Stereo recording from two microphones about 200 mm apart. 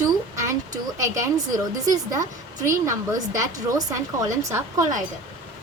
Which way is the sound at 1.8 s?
15° right (ahead or behind).